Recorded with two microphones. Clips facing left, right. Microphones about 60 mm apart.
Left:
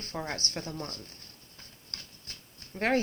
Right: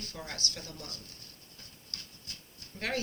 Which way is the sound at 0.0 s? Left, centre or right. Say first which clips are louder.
Left 5 dB; left.